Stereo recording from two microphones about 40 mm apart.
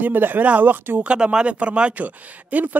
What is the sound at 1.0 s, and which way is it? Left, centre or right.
Speech, right.